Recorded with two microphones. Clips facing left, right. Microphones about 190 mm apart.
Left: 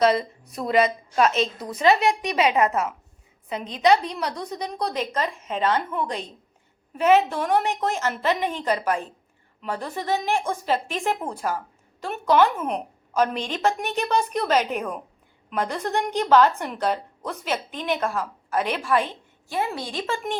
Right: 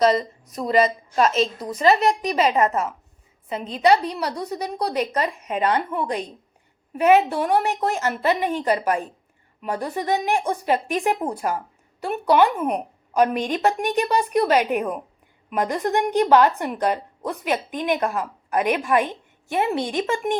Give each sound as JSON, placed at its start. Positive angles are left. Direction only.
{"t": 0.0, "sound": "a woman's voice", "side_deg": 0}